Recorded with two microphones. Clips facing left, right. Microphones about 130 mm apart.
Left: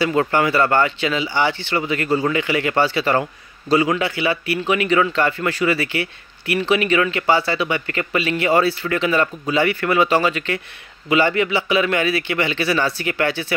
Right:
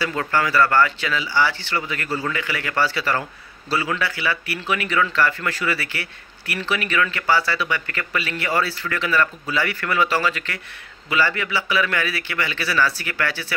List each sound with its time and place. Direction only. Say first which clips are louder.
0.3 s a man's voice: left 2 dB; 20° left (ahead or behind)